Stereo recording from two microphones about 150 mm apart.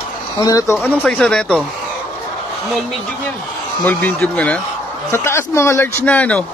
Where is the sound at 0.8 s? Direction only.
5° left (ahead or behind).